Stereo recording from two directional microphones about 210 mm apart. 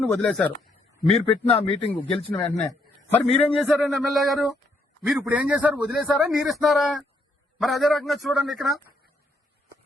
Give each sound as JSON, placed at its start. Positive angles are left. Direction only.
{"t": 0.1, "sound": "speech", "side_deg": 5}
{"t": 1.2, "sound": "speech", "side_deg": 25}
{"t": 2.3, "sound": "a man's voice", "side_deg": 5}
{"t": 3.2, "sound": "speech", "side_deg": 30}
{"t": 3.5, "sound": "a man's voice", "side_deg": 0}